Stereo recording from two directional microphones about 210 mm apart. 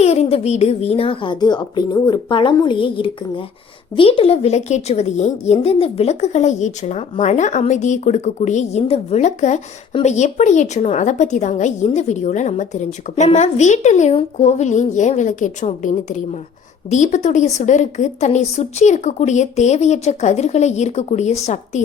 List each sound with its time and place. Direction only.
0.0 s a woman's voice: 30° left (ahead or behind)